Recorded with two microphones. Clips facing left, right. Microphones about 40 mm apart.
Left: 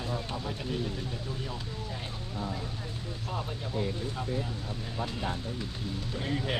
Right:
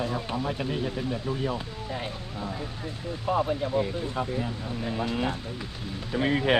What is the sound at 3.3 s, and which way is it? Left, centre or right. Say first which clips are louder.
Speech: right 12 dB; right.